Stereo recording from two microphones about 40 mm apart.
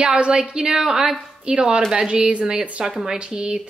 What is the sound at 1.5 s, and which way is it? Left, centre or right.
A woman's voice, right.